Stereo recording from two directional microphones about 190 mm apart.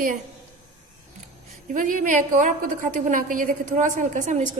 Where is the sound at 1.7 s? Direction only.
45° right (ahead or behind).